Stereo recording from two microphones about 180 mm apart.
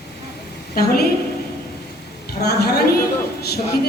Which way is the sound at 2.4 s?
65° left (ahead or behind).